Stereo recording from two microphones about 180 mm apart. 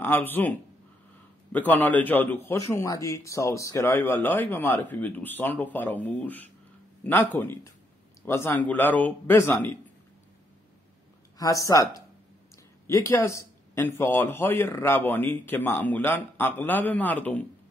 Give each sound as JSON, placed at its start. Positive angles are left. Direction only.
{"t": 0.0, "sound": "a man's voice", "side_deg": 10}
{"t": 11.3, "sound": "speech", "side_deg": 20}
{"t": 12.8, "sound": "a man's voice", "side_deg": 15}